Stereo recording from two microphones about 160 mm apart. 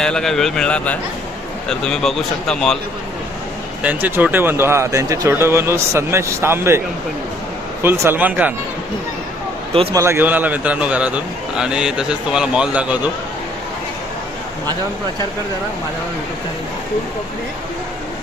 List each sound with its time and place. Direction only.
0.0 s a man's voice: 5° left (ahead or behind)
3.8 s speech: 10° right (ahead or behind)
9.9 s a man's voice: 15° right (ahead or behind)